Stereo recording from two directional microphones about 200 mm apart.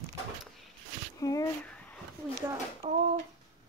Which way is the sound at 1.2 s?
15° left (ahead or behind).